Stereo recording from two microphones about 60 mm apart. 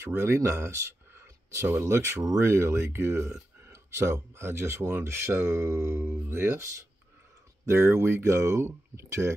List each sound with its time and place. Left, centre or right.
0.0 s speech: right